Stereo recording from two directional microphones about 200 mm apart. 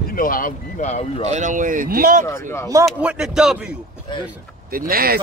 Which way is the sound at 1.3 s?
40° right (ahead or behind).